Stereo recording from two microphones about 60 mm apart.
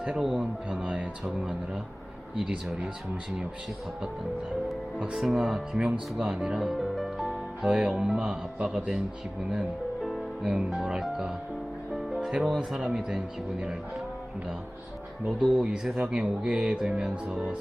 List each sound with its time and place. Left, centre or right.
0.0 s speech: centre
2.5 s speech: centre
5.1 s speech: centre
5.8 s speech: centre
6.6 s music: centre
7.6 s speech: centre
9.5 s music: centre
10.7 s speech: centre
11.9 s music: centre
12.5 s speech: centre
15.5 s speech: centre